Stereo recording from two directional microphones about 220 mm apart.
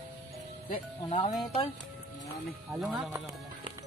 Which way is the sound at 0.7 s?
30° left (ahead or behind).